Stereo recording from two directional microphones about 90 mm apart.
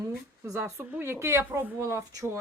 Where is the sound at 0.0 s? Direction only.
35° right (ahead or behind).